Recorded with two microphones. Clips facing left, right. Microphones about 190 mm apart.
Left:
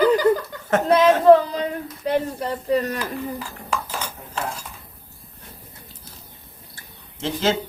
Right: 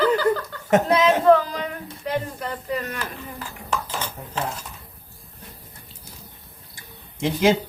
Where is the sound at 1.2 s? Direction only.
25° left (ahead or behind).